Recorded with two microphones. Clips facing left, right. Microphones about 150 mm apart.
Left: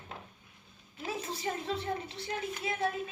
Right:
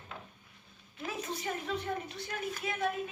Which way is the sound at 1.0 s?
30° left (ahead or behind).